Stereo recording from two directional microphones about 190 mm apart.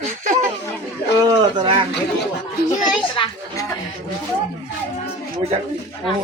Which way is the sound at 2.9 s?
25° left (ahead or behind).